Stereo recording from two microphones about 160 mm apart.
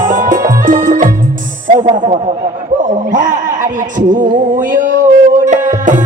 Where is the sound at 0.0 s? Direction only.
55° right (ahead or behind).